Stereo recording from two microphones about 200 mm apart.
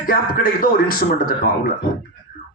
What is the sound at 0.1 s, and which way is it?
Speech, 45° left (ahead or behind).